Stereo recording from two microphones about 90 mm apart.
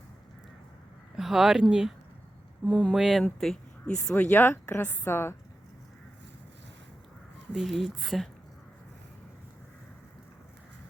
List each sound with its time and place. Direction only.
1.1 s speech: 5° right (ahead or behind)
2.9 s speech: 5° right (ahead or behind)
3.4 s a sound: 5° left (ahead or behind)
4.1 s speech: 20° left (ahead or behind)
7.5 s speech: centre (ahead or behind)